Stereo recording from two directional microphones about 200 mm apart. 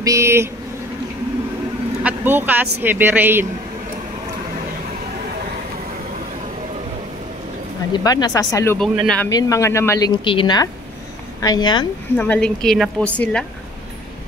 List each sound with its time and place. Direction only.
0.0 s speech: 15° right (ahead or behind)
2.0 s speech: 10° right (ahead or behind)
7.9 s speech: 20° left (ahead or behind)
8.7 s a woman's voice: centre (ahead or behind)
9.3 s a woman's voice: 15° left (ahead or behind)
12.2 s a woman's voice: 5° left (ahead or behind)